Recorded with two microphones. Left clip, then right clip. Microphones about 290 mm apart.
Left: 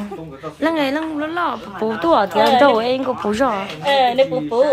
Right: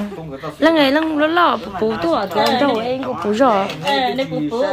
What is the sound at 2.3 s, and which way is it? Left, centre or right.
Speech, left.